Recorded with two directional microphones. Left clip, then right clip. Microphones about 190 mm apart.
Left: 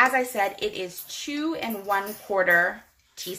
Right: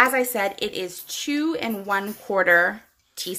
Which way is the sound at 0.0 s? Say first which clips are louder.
Right 2 dB; 50° right (ahead or behind).